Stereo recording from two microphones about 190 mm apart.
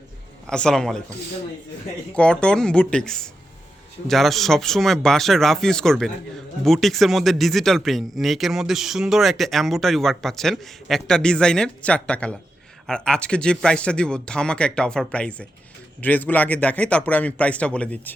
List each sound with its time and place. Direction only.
0.4 s speech: 5° left (ahead or behind)
2.1 s a man's voice: 5° left (ahead or behind)